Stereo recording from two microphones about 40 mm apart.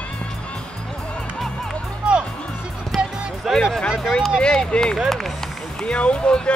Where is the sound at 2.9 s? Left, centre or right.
Centre.